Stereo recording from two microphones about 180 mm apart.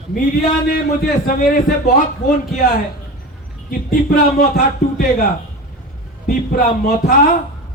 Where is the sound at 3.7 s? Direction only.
50° left (ahead or behind).